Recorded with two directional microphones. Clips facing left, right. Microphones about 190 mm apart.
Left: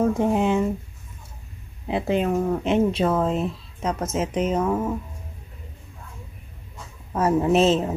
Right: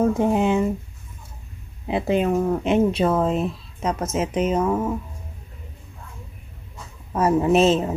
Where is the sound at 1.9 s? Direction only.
15° right (ahead or behind).